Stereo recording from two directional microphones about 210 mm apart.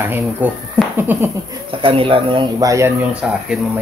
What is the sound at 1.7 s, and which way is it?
Speech, 25° right (ahead or behind).